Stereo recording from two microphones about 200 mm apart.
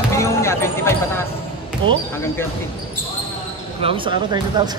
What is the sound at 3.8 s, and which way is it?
Speech, 25° right (ahead or behind).